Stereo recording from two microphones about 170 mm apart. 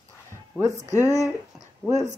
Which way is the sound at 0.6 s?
15° right (ahead or behind).